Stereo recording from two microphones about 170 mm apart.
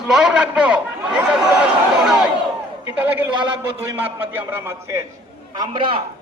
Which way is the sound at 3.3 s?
30° right (ahead or behind).